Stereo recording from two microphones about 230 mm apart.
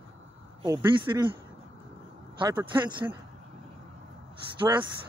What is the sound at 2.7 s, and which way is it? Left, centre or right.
Speech, right.